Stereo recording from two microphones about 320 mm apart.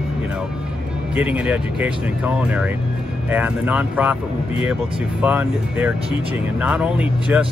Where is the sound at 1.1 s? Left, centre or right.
Centre.